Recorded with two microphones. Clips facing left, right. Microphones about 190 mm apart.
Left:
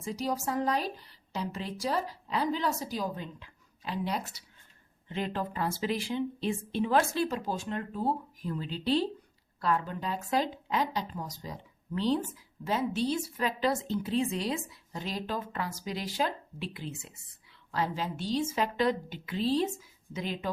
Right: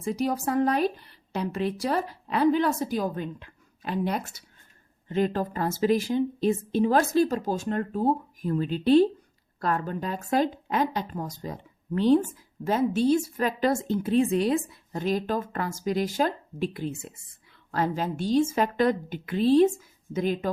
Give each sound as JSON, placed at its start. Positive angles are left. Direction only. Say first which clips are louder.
{"t": 0.0, "sound": "a woman's voice", "louder": "right 6 dB", "side_deg": -55}